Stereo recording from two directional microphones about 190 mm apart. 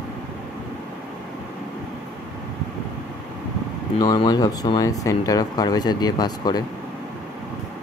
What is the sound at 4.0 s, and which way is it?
Speech, 25° left (ahead or behind).